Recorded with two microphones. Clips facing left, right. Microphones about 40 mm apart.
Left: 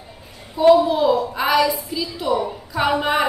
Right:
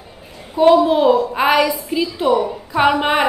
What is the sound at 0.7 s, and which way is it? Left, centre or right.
Speech, right.